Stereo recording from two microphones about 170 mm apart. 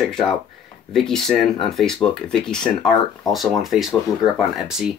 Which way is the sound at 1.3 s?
30° left (ahead or behind).